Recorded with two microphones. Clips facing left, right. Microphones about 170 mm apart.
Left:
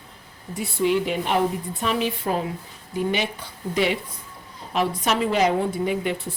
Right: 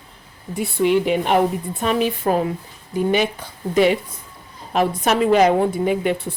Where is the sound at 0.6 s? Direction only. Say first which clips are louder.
Right 4 dB; 65° right (ahead or behind).